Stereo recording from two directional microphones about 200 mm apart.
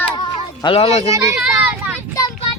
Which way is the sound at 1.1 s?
15° right (ahead or behind).